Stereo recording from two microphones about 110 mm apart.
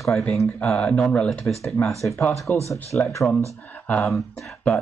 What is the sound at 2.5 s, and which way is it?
Speech, 15° left (ahead or behind).